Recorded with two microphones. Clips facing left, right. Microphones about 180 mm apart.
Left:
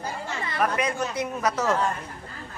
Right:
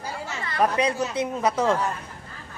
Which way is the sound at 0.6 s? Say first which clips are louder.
Right 3 dB; 30° right (ahead or behind).